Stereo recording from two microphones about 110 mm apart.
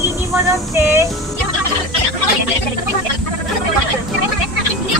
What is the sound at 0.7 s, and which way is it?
Music, 20° right (ahead or behind).